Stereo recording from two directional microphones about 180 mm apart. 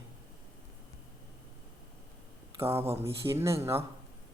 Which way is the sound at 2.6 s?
15° right (ahead or behind).